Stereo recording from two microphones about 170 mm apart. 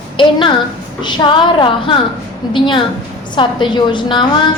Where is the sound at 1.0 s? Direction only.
25° left (ahead or behind).